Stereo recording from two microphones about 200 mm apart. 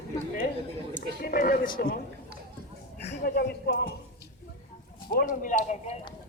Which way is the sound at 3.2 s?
55° left (ahead or behind).